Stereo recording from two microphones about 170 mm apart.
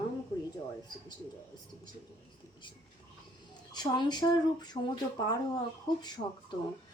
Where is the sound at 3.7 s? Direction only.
25° left (ahead or behind).